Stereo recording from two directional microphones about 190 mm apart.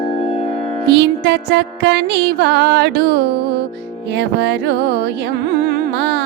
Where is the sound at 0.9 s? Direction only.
65° right (ahead or behind).